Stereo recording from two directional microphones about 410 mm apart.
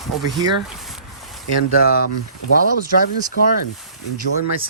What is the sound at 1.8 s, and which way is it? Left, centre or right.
Speech, left.